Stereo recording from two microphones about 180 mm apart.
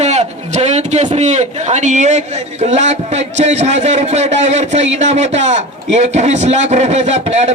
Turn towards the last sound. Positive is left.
turn(degrees=-40)  # may be behind; listen again after turning